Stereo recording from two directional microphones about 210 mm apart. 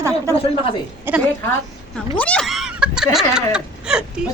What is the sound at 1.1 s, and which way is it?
Speech, 10° right (ahead or behind).